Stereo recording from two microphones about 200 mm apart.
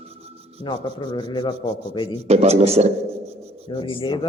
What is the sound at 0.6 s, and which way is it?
Rub, 25° left (ahead or behind).